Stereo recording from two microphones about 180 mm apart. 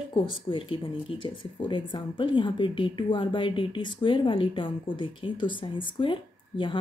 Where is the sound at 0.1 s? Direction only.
30° left (ahead or behind).